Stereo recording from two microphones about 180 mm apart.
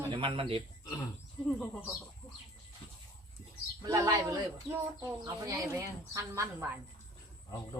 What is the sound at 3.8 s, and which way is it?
A woman's voice, 20° right (ahead or behind).